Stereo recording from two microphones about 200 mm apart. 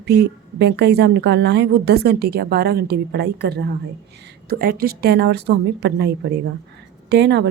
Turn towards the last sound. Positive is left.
turn(degrees=-55)  # may be behind; listen again after turning